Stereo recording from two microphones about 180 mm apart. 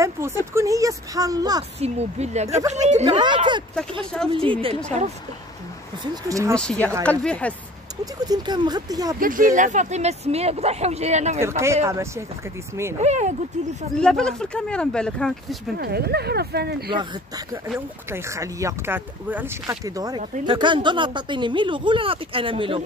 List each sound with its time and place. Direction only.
0.0 s a sound: 15° right (ahead or behind)
0.5 s speech: 15° right (ahead or behind)
1.8 s speech: 35° right (ahead or behind)
3.1 s speech: 25° right (ahead or behind)
6.2 s speech: 20° right (ahead or behind)
6.5 s speech: 5° left (ahead or behind)
8.0 s speech: 20° right (ahead or behind)
9.2 s speech: 50° right (ahead or behind)
11.6 s speech: 15° right (ahead or behind)
13.0 s speech: 40° right (ahead or behind)
14.0 s speech: 5° left (ahead or behind)
15.8 s speech: 60° right (ahead or behind)
17.7 s speech: 15° right (ahead or behind)